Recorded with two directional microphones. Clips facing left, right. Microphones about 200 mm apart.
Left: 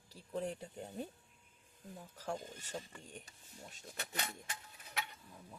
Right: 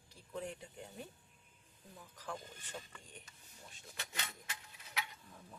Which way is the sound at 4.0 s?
40° left (ahead or behind).